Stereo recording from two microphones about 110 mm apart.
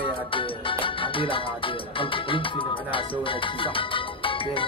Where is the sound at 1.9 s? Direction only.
50° left (ahead or behind).